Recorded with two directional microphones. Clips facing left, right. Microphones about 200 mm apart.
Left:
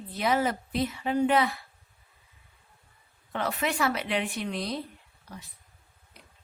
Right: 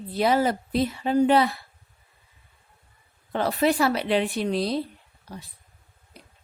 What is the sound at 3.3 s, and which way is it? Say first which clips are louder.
A woman's voice: right 7 dB; 35° right (ahead or behind).